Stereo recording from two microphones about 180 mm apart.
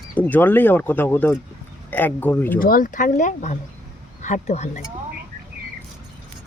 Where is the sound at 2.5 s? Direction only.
50° left (ahead or behind).